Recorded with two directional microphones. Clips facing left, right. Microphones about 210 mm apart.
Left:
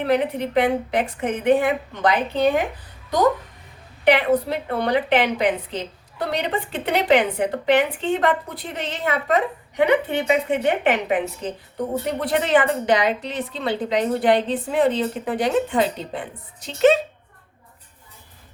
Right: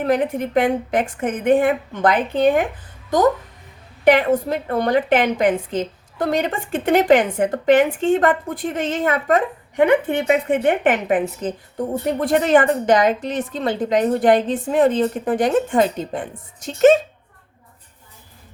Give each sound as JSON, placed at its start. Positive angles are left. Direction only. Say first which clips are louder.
{"t": 0.0, "sound": "a woman's voice", "louder": "right 2 dB", "side_deg": -45}
{"t": 4.0, "sound": "a woman's voice", "louder": "right 3 dB", "side_deg": -45}